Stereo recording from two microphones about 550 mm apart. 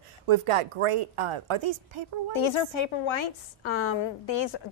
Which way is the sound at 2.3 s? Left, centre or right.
Left.